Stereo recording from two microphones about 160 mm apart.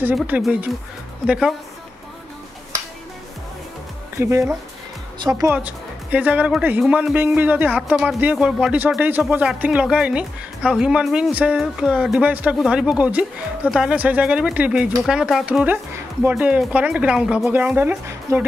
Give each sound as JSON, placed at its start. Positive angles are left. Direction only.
{"t": 0.0, "sound": "speech", "side_deg": -5}
{"t": 4.2, "sound": "speech", "side_deg": -15}
{"t": 5.5, "sound": "speech", "side_deg": -10}
{"t": 7.9, "sound": "speech", "side_deg": 0}